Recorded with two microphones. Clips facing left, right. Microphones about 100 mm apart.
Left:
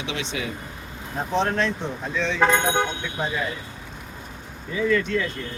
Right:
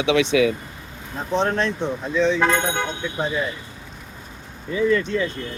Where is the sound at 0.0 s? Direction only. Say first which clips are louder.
Right 12 dB; 70° right (ahead or behind).